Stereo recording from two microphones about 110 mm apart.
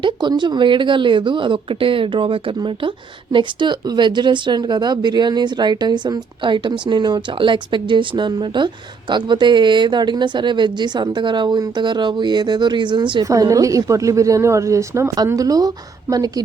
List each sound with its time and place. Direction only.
0.0 s speech: 45° right (ahead or behind)
13.2 s a woman's voice: 30° right (ahead or behind)